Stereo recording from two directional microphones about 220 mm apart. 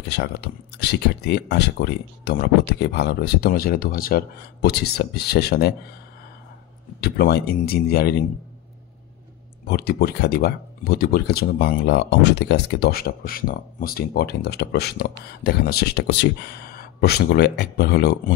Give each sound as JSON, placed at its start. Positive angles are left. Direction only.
{"t": 0.1, "sound": "speech", "side_deg": 50}
{"t": 7.0, "sound": "speech", "side_deg": 45}
{"t": 9.7, "sound": "speech", "side_deg": 45}